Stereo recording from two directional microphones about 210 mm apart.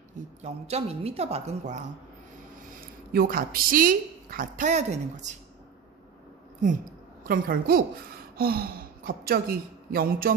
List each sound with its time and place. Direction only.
0.4 s a woman's voice: 30° right (ahead or behind)
3.1 s a woman's voice: 45° right (ahead or behind)
7.2 s speech: 45° right (ahead or behind)